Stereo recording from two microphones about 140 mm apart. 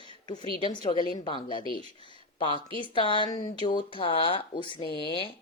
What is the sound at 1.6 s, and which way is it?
Speech, 40° right (ahead or behind).